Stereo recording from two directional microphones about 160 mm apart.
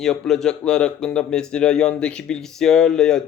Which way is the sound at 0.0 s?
5° left (ahead or behind).